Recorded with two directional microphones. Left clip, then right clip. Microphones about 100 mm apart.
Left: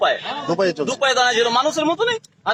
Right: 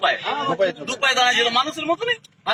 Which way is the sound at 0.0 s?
35° left (ahead or behind).